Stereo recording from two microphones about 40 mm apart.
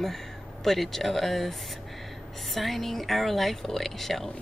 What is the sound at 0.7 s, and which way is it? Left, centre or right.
Speech, centre.